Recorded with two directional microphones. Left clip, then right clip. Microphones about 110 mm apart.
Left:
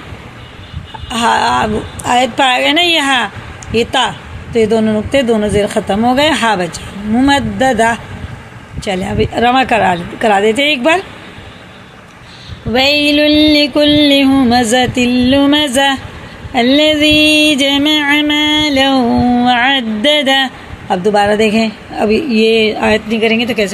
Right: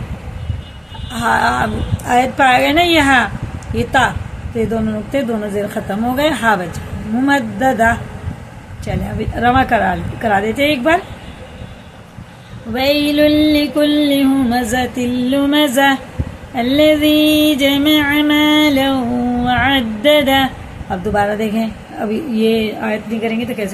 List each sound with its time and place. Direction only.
1.1 s a woman's voice: 55° left (ahead or behind)
5.1 s a woman's voice: 55° left (ahead or behind)
7.2 s music: 55° left (ahead or behind)
12.7 s music: 50° left (ahead or behind); by 23.7 s 85° left